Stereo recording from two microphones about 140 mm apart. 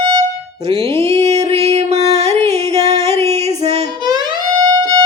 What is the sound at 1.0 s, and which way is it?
Music, 50° right (ahead or behind).